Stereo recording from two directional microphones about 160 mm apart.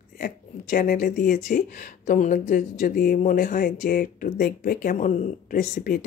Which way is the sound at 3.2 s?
55° left (ahead or behind).